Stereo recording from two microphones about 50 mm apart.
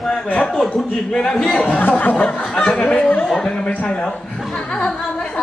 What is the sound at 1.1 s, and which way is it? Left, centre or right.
Speech, centre.